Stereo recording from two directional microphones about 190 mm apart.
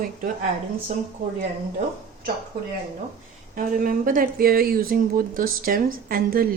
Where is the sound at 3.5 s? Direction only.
45° right (ahead or behind).